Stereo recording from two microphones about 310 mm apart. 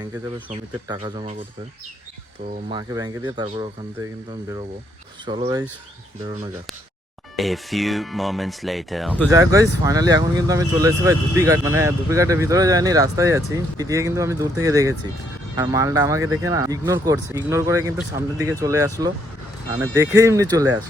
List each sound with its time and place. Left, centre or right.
0.9 s speech: centre
2.6 s speech: centre
5.2 s speech: centre
7.3 s speech: centre